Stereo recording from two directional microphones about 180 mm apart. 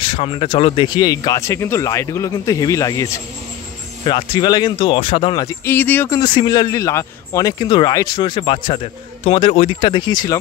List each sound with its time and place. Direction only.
0.0 s speech: 30° left (ahead or behind)
5.7 s speech: 10° left (ahead or behind)